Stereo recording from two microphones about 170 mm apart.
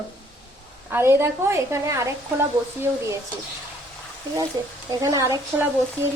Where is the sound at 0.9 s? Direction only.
15° right (ahead or behind).